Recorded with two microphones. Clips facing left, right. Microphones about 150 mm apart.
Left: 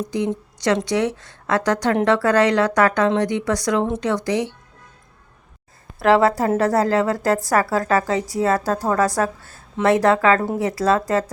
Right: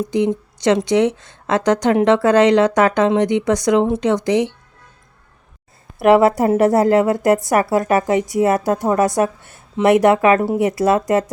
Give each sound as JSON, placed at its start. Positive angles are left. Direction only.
{"t": 0.1, "sound": "a woman's voice", "side_deg": -20}
{"t": 6.0, "sound": "a woman's voice", "side_deg": -20}